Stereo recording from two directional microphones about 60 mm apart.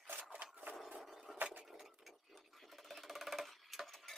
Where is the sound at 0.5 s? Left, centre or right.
Right.